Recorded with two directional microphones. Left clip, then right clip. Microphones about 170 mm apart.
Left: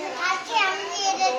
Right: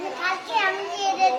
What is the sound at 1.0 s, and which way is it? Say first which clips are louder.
Children playing: right 2 dB; centre (ahead or behind).